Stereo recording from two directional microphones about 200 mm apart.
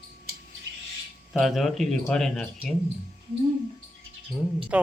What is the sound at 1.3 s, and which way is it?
Speech, centre (ahead or behind).